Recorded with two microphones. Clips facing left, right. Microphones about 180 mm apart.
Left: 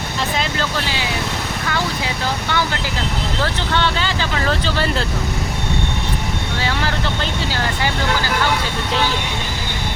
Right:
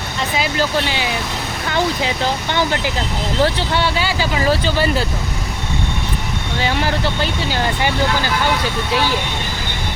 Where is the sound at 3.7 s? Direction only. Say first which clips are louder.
Right 1 dB; 10° right (ahead or behind).